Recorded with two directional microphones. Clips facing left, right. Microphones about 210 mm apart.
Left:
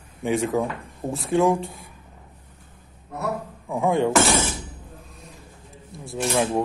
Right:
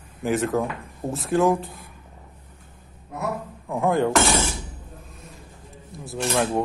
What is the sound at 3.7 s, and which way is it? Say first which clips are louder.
Speech: even; centre (ahead or behind).